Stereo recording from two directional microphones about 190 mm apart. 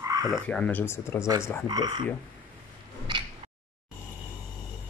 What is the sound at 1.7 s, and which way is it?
Speech, 20° right (ahead or behind).